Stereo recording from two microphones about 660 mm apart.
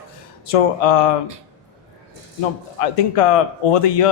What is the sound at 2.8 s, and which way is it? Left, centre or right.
Speech, left.